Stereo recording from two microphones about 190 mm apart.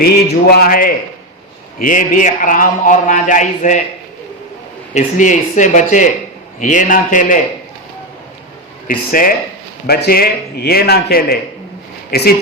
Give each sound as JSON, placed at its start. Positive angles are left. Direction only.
{"t": 0.5, "sound": "speech", "side_deg": 50}
{"t": 4.9, "sound": "speech", "side_deg": 40}
{"t": 8.9, "sound": "a man's voice", "side_deg": 45}